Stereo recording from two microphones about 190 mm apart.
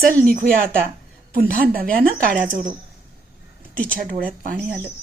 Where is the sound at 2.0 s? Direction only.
5° left (ahead or behind).